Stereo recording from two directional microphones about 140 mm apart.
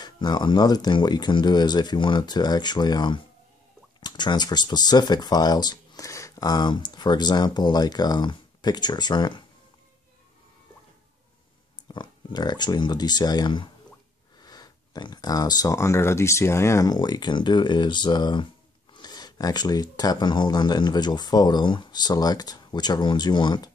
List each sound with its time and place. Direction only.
0.0 s speech: 30° left (ahead or behind)
11.9 s speech: 30° left (ahead or behind)